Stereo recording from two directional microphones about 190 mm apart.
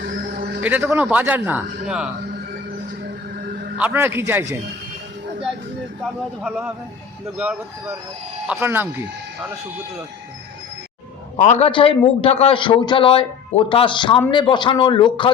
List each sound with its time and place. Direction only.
0.0 s a sound: 60° right (ahead or behind)
0.6 s a man's voice: 10° right (ahead or behind)
3.0 s music: 55° right (ahead or behind)
3.8 s a man's voice: 10° right (ahead or behind)
6.4 s a man's voice: 10° right (ahead or behind)
11.3 s a man's voice: 40° left (ahead or behind)